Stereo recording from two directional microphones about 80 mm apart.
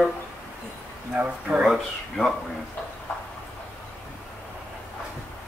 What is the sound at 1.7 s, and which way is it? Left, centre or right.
Speech, centre.